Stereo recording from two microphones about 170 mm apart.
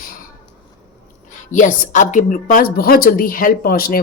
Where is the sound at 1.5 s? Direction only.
50° left (ahead or behind).